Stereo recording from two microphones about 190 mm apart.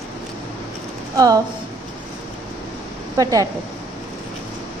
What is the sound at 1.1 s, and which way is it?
Speech, 20° right (ahead or behind).